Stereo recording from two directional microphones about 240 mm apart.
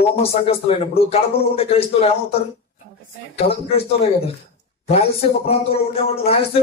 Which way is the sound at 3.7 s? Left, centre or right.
Left.